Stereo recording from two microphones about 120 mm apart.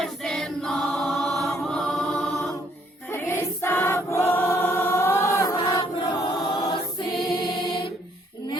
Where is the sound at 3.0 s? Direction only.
20° left (ahead or behind).